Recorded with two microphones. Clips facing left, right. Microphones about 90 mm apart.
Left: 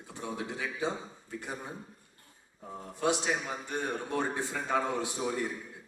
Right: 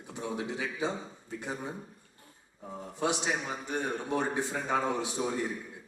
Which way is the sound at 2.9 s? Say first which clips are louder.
Left 1 dB; 20° right (ahead or behind).